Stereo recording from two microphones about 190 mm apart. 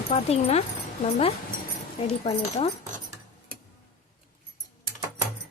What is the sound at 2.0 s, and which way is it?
Speech, 30° left (ahead or behind).